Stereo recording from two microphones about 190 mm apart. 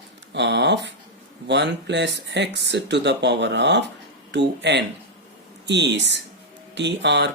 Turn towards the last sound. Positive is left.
turn(degrees=-65)  # may be behind; listen again after turning